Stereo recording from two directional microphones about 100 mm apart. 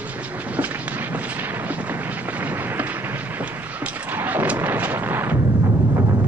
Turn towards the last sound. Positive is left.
turn(degrees=-25)  # may be behind; listen again after turning